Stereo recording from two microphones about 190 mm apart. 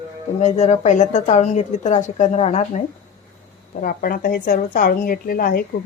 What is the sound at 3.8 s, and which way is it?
Speech, 50° left (ahead or behind).